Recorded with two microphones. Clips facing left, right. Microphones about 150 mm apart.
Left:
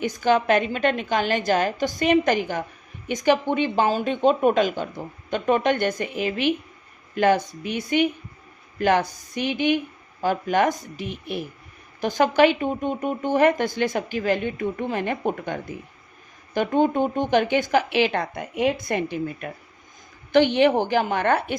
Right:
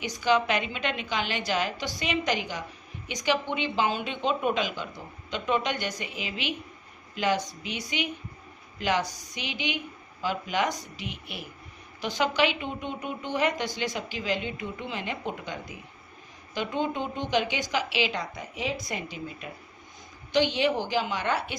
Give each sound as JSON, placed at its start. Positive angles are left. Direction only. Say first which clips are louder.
{"t": 0.0, "sound": "a woman's voice", "louder": "left 4 dB", "side_deg": 50}